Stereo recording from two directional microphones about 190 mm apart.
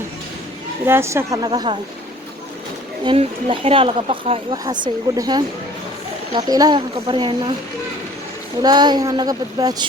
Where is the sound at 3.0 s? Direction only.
30° right (ahead or behind).